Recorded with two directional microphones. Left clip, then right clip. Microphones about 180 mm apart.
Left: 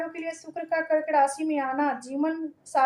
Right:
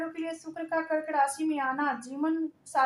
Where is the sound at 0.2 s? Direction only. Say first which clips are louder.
Left 2 dB; 15° left (ahead or behind).